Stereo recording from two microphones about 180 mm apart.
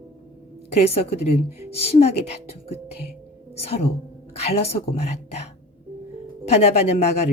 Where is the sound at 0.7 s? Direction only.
35° left (ahead or behind).